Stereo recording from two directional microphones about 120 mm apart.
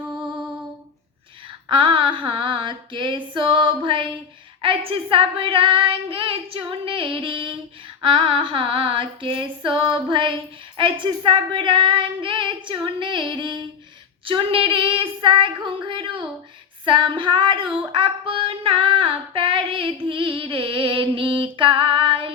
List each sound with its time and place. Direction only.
1.7 s female singing: 45° right (ahead or behind)